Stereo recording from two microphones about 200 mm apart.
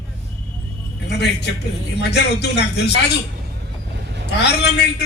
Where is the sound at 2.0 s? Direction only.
60° left (ahead or behind).